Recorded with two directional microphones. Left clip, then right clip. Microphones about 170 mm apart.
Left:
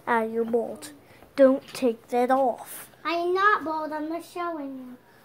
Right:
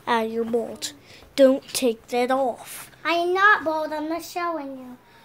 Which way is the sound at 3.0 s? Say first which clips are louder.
Right 4 dB; 20° right (ahead or behind).